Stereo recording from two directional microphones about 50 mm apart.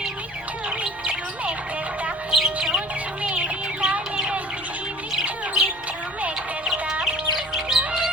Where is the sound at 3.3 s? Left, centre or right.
Centre.